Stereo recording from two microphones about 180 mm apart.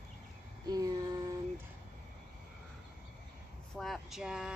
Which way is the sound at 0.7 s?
20° right (ahead or behind).